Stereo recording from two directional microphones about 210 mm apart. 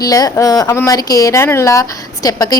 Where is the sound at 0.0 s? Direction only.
15° left (ahead or behind).